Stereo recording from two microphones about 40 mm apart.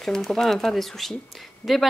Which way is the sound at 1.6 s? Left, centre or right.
Left.